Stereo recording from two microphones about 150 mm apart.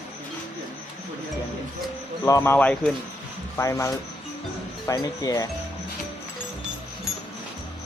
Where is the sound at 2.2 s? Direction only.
20° left (ahead or behind).